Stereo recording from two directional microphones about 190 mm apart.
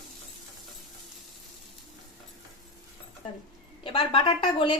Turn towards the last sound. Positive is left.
turn(degrees=25)  # may be behind; listen again after turning